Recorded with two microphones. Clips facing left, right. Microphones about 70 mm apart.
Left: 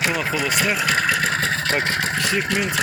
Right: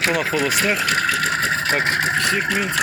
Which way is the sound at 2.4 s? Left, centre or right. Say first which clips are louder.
Right 1 dB; centre.